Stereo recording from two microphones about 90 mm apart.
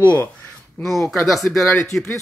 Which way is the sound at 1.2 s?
Centre (ahead or behind).